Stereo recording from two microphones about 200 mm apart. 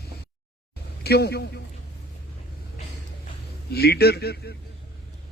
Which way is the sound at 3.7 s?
50° left (ahead or behind).